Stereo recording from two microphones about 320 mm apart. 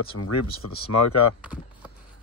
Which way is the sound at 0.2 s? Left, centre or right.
Left.